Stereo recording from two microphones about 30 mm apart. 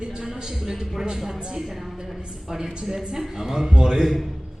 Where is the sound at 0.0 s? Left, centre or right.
Right.